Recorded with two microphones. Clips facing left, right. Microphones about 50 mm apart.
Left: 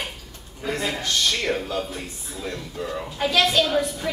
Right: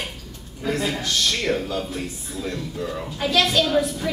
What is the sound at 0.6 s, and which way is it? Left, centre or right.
A man's voice, centre.